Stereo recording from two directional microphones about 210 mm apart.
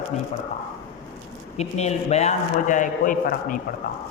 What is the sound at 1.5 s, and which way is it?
A man's voice, 30° left (ahead or behind).